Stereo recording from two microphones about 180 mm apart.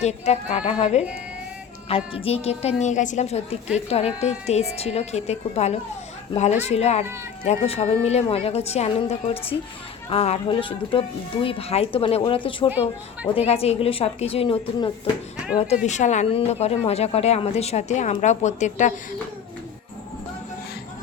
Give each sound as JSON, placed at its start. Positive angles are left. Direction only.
{"t": 0.0, "sound": "a woman's voice", "side_deg": 35}